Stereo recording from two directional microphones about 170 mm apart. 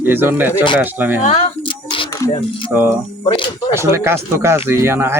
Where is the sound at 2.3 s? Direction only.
30° left (ahead or behind).